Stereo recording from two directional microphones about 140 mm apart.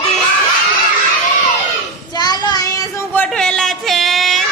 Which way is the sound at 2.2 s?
30° left (ahead or behind).